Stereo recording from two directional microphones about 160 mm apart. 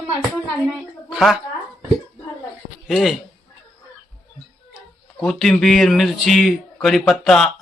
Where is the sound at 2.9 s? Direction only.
Centre (ahead or behind).